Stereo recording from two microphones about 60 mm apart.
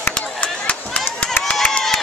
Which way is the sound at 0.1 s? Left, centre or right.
Left.